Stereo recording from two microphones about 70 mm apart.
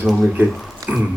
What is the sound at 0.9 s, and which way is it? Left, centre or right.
Speech, right.